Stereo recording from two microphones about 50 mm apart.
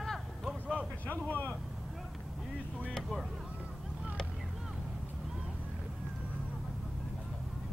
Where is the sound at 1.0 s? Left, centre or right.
Left.